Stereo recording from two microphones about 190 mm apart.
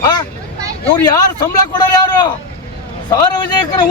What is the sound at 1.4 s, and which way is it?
Speech, 20° left (ahead or behind).